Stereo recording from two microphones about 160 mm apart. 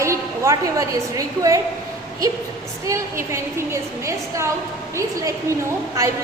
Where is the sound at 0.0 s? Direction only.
20° right (ahead or behind).